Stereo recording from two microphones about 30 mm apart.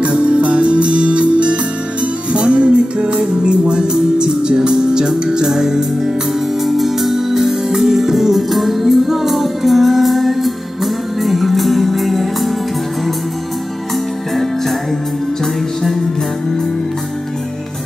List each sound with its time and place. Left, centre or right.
0.0 s music: right; by 6.1 s centre
6.6 s music: centre
14.3 s music: centre